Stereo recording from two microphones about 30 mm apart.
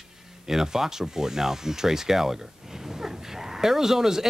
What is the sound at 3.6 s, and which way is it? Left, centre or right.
Speech, centre.